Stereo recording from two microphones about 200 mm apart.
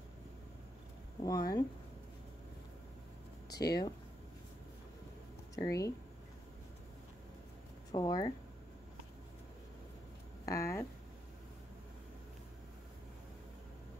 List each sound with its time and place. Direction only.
1.2 s speech: 15° left (ahead or behind)
3.6 s speech: 20° left (ahead or behind)
5.6 s speech: 15° left (ahead or behind)
7.9 s speech: 20° left (ahead or behind)
10.4 s speech: 15° left (ahead or behind)